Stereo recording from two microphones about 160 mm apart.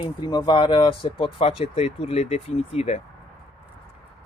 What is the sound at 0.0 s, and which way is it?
Speech, 25° left (ahead or behind).